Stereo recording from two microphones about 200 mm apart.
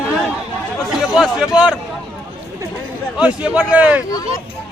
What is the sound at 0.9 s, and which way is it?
Speech, centre (ahead or behind).